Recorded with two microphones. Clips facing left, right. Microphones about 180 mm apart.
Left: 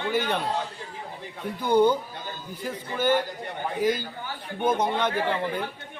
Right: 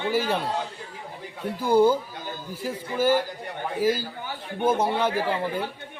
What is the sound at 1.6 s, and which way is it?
A man's voice, 5° right (ahead or behind).